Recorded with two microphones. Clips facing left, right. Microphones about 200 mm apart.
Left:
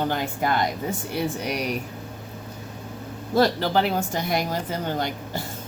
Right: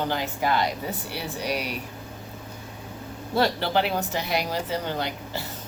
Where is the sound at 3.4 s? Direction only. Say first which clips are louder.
Left 3 dB; 40° left (ahead or behind).